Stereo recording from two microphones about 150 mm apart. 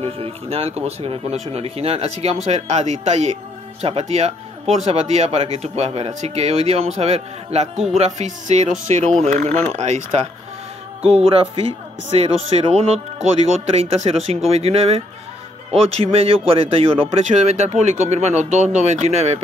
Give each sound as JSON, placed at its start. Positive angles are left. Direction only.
{"t": 0.0, "sound": "speech", "side_deg": -40}
{"t": 7.7, "sound": "speech", "side_deg": -5}
{"t": 8.0, "sound": "speech", "side_deg": -50}